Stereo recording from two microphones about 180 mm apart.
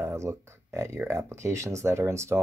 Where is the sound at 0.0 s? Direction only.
15° right (ahead or behind).